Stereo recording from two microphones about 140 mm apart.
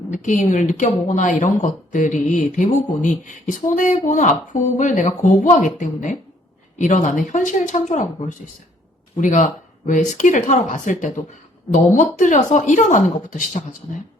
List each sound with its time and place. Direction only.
0.1 s speech: 70° left (ahead or behind)